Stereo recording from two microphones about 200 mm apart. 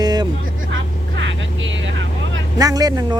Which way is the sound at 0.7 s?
70° right (ahead or behind).